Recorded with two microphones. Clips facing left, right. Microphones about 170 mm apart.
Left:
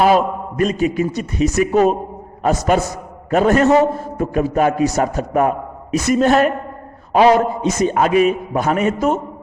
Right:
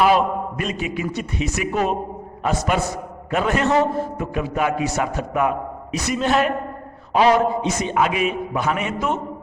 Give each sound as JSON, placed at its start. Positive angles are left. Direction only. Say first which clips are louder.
{"t": 0.0, "sound": "a man's voice", "louder": "left 3 dB", "side_deg": 40}